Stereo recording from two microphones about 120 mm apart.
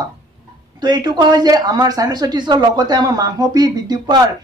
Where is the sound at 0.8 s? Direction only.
35° right (ahead or behind).